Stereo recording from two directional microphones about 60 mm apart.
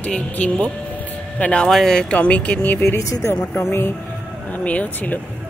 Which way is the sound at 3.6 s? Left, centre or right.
Left.